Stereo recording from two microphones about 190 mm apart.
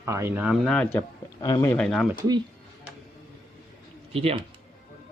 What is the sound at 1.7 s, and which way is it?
Speech, 5° left (ahead or behind).